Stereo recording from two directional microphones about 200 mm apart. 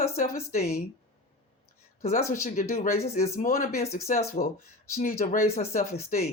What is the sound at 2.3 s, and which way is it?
Speech, 45° left (ahead or behind).